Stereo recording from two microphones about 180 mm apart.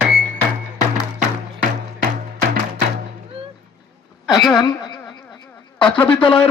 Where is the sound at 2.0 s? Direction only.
55° right (ahead or behind).